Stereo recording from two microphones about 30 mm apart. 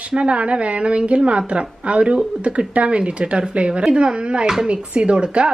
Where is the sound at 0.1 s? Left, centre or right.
Right.